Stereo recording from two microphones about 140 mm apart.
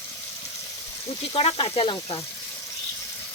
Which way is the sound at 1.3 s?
40° left (ahead or behind).